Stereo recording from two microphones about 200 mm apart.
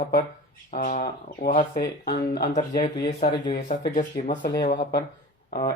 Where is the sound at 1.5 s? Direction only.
45° left (ahead or behind).